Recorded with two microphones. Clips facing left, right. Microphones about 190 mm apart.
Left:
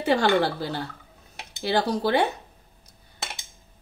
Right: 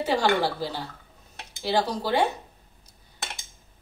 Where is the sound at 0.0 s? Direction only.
60° left (ahead or behind).